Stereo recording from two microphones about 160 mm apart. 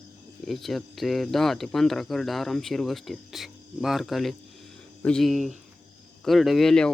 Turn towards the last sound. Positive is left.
turn(degrees=5)  # may be behind; listen again after turning